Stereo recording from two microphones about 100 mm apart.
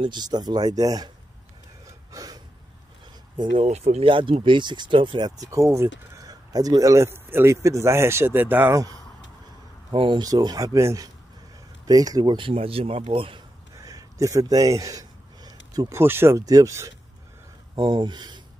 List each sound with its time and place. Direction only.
0.0 s speech: 45° right (ahead or behind)
1.9 s gasp: 35° right (ahead or behind)
3.6 s speech: 90° right; by 5.3 s 55° right (ahead or behind)
5.4 s speech: 30° right (ahead or behind)
8.7 s speech: 35° right (ahead or behind)
9.9 s speech: 55° right (ahead or behind)
10.2 s speech: 40° right (ahead or behind)
12.4 s speech: 70° right (ahead or behind)
13.7 s speech: 35° right (ahead or behind)
15.9 s speech: 25° right (ahead or behind)
17.7 s speech: 50° right (ahead or behind)